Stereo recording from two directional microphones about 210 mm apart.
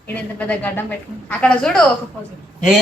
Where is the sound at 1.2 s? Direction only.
5° left (ahead or behind).